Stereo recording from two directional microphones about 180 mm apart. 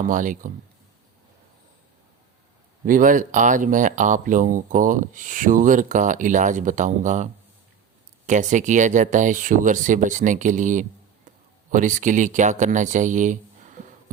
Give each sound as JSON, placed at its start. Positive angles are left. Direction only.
{"t": 0.0, "sound": "speech", "side_deg": -45}
{"t": 2.8, "sound": "speech", "side_deg": -50}
{"t": 8.3, "sound": "speech", "side_deg": -45}